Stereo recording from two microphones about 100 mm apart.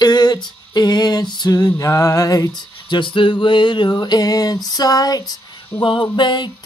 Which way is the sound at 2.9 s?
50° left (ahead or behind).